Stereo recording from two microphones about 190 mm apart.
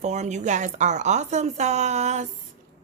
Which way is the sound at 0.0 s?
35° right (ahead or behind).